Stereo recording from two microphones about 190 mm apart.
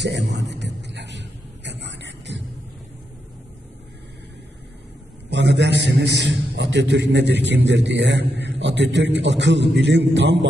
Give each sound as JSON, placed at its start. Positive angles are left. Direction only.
{"t": 0.0, "sound": "speech", "side_deg": -65}
{"t": 0.5, "sound": "a sound", "side_deg": -65}
{"t": 5.3, "sound": "a man's voice", "side_deg": -65}